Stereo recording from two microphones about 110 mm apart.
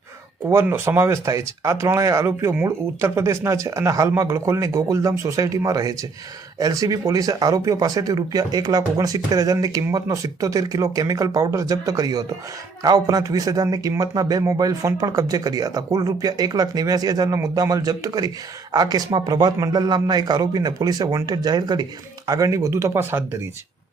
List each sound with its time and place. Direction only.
0.4 s a man's voice: 20° right (ahead or behind)